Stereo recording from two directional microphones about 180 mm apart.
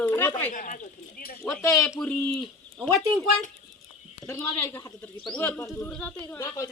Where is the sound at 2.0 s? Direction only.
5° left (ahead or behind).